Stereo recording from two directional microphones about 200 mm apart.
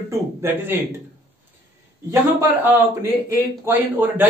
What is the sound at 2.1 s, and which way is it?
Speech, 15° right (ahead or behind).